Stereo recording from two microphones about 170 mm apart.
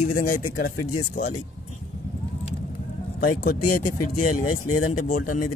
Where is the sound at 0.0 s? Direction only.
50° left (ahead or behind).